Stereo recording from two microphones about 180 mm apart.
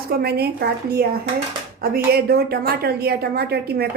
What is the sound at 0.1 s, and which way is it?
A woman's voice, 60° right (ahead or behind).